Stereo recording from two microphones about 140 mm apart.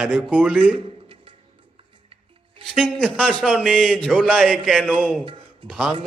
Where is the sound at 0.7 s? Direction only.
40° right (ahead or behind).